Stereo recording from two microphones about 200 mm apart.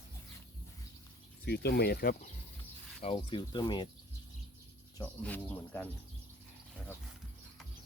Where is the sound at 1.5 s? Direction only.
55° left (ahead or behind).